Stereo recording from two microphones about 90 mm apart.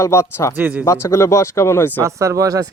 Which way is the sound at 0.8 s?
35° left (ahead or behind).